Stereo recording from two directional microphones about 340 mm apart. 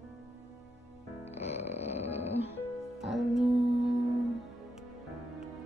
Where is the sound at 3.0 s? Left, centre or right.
Centre.